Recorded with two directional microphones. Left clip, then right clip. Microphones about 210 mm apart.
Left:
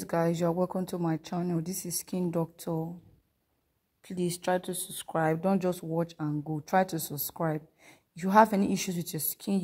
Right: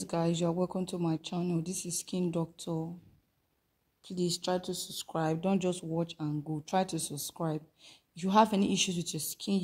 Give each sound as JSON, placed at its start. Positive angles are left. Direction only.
{"t": 0.0, "sound": "a woman's voice", "side_deg": 25}
{"t": 4.0, "sound": "a woman's voice", "side_deg": 25}